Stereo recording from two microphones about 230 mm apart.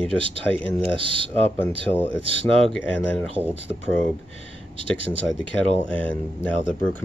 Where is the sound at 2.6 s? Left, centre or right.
Centre.